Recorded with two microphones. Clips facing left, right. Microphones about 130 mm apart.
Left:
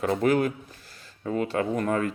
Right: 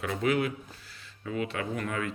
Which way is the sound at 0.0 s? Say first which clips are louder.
Left 5 dB; 40° left (ahead or behind).